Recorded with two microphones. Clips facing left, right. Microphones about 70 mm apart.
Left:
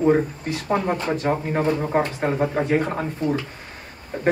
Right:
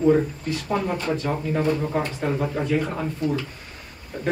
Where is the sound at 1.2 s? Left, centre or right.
Left.